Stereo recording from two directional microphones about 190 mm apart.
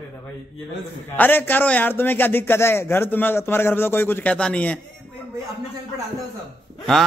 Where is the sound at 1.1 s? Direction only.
10° left (ahead or behind).